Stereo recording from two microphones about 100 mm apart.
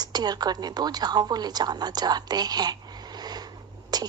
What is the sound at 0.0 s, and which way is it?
A woman's voice, 45° right (ahead or behind).